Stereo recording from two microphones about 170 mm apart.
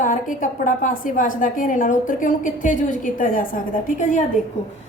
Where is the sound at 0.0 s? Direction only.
50° left (ahead or behind).